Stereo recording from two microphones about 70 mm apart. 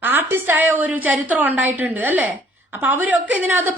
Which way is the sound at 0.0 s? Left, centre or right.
Right.